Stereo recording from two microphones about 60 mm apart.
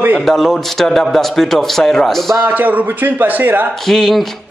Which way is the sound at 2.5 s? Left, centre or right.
Right.